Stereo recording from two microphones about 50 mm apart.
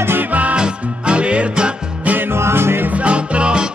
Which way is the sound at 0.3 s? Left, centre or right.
Right.